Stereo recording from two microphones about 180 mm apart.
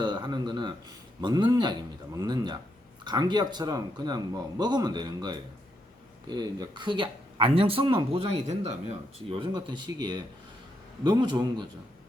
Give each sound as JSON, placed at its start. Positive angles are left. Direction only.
{"t": 0.0, "sound": "speech", "side_deg": -25}